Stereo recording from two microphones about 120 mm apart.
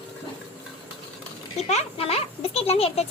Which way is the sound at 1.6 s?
60° left (ahead or behind).